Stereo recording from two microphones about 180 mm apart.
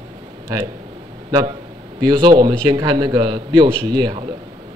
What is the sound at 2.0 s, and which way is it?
A man's voice, 25° right (ahead or behind).